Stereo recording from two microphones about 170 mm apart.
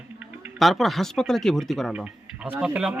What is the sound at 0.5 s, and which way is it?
Speech, centre (ahead or behind).